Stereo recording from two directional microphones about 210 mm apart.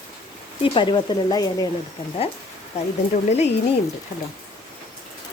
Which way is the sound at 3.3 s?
30° left (ahead or behind).